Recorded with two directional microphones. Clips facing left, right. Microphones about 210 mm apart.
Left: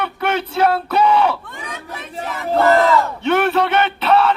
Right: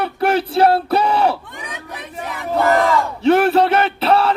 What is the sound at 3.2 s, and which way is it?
Speech, 30° right (ahead or behind).